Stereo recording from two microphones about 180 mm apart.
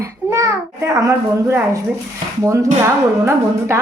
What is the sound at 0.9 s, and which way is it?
Speech, 15° right (ahead or behind).